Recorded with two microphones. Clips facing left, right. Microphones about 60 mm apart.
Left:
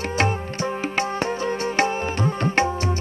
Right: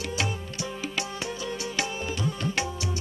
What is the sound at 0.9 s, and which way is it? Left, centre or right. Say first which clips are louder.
Music: left 10 dB; left.